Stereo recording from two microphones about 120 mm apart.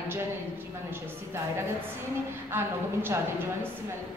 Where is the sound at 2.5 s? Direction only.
20° right (ahead or behind).